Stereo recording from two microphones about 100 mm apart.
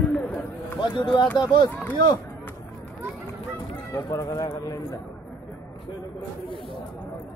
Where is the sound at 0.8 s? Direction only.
50° left (ahead or behind).